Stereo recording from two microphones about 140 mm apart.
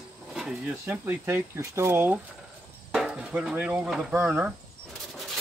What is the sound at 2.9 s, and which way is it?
Speech, 5° right (ahead or behind).